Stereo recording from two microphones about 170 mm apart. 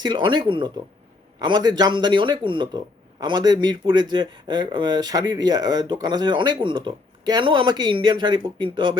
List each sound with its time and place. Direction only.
0.0 s speech: 25° right (ahead or behind)